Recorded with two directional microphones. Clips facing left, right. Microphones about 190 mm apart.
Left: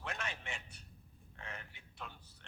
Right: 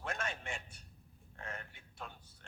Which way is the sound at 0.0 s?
45° right (ahead or behind).